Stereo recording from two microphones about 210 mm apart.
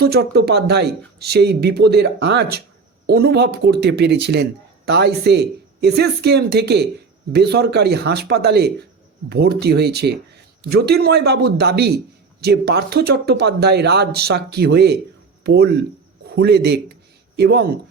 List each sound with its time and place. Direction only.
0.0 s speech: 50° right (ahead or behind)